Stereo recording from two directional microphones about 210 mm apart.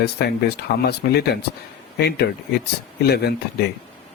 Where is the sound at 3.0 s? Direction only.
50° left (ahead or behind).